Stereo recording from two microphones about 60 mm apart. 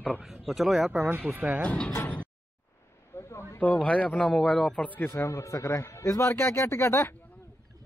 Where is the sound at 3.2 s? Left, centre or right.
Left.